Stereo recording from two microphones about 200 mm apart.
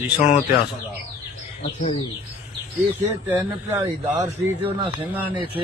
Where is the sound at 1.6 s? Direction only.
35° left (ahead or behind).